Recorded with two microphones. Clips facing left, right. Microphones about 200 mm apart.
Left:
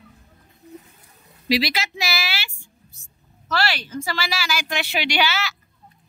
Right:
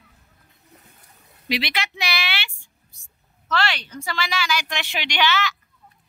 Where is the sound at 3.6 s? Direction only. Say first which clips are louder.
Left 2 dB; 5° left (ahead or behind).